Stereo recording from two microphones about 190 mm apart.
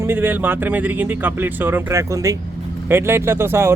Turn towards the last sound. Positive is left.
turn(degrees=-15)  # may be behind; listen again after turning